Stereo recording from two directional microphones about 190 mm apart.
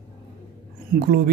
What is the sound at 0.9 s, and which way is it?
Speech, 55° right (ahead or behind).